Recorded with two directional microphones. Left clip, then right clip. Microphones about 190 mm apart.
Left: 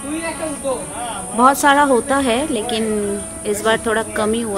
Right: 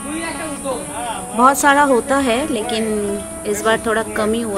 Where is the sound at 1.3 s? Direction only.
Centre (ahead or behind).